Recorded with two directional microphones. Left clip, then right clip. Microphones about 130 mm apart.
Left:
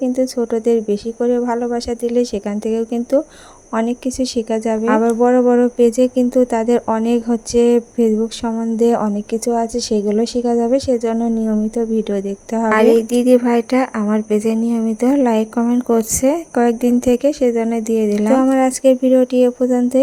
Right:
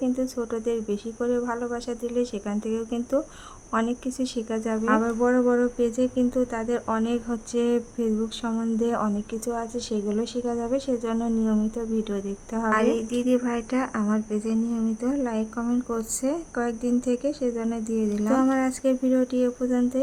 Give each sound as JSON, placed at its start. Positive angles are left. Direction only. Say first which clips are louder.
{"t": 0.0, "sound": "speech", "louder": "left 10 dB", "side_deg": 35}